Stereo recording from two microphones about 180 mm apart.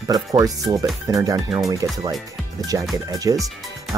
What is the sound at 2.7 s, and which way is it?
Speech, 15° right (ahead or behind).